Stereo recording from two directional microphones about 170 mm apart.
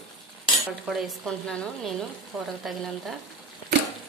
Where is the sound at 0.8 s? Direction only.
Centre (ahead or behind).